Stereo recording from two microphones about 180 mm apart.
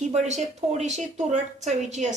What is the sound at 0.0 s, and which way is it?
Speech, 40° right (ahead or behind).